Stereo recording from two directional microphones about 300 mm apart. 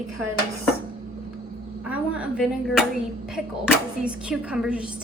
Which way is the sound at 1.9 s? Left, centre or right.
Centre.